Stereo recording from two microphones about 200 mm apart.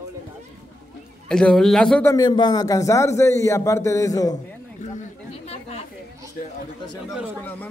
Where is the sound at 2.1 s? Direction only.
20° left (ahead or behind).